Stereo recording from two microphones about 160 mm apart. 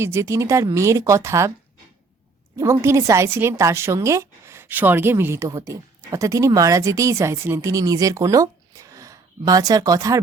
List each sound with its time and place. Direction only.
0.0 s a woman's voice: 15° right (ahead or behind)
2.6 s a woman's voice: 15° right (ahead or behind)